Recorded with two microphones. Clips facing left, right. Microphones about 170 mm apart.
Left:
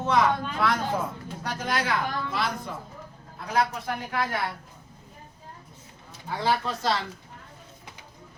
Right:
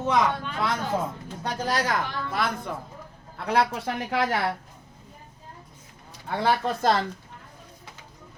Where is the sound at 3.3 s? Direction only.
70° right (ahead or behind).